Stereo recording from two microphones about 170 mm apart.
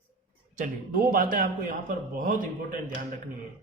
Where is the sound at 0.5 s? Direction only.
50° right (ahead or behind).